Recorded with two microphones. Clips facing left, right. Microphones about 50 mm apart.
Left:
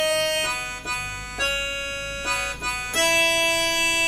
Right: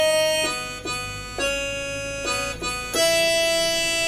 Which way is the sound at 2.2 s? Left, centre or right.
Left.